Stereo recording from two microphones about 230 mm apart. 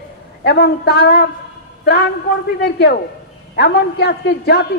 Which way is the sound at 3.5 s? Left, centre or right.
Left.